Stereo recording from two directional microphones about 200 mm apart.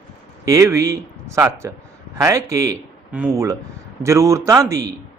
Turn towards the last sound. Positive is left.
turn(degrees=-15)  # may be behind; listen again after turning